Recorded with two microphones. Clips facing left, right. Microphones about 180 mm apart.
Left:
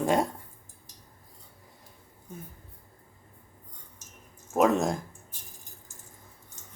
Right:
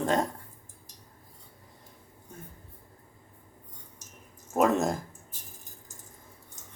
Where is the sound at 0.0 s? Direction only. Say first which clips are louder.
Left 2 dB; 10° left (ahead or behind).